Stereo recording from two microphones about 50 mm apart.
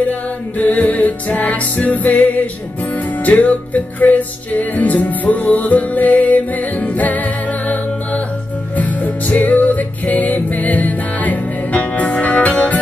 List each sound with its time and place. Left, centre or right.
0.0 s music: left